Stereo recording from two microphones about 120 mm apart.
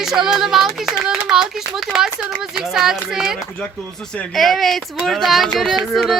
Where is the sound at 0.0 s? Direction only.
5° right (ahead or behind).